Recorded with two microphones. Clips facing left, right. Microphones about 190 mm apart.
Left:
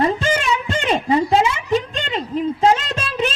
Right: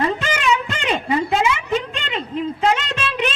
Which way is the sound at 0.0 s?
30° left (ahead or behind).